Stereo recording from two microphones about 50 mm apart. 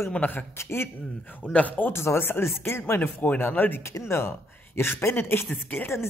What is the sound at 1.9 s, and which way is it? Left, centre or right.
A woman's voice, left.